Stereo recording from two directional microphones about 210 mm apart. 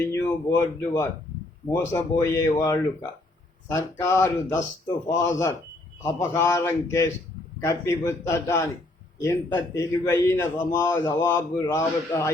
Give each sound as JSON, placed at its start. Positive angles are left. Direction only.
{"t": 0.1, "sound": "a man's voice", "side_deg": 15}